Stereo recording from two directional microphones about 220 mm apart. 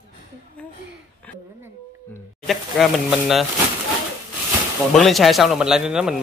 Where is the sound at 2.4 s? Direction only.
Centre (ahead or behind).